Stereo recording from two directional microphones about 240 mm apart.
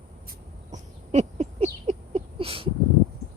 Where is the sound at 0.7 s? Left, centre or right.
Right.